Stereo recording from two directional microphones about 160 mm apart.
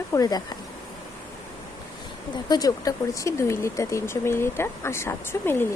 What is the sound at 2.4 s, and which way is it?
Speech, 25° left (ahead or behind).